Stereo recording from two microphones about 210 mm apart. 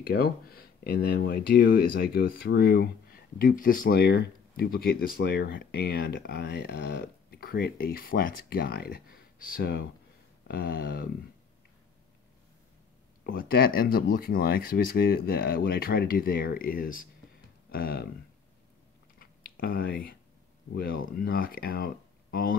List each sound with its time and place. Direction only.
0.0 s speech: 45° left (ahead or behind)
13.2 s speech: 45° left (ahead or behind)
19.1 s typing: 45° left (ahead or behind)
20.7 s speech: 45° left (ahead or behind)